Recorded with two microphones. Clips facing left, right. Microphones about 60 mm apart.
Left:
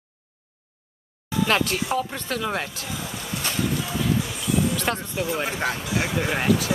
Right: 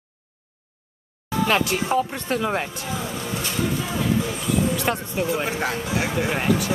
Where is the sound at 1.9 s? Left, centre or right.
Right.